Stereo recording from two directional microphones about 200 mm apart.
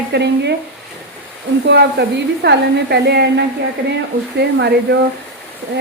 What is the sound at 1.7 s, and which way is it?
Speech, 55° right (ahead or behind).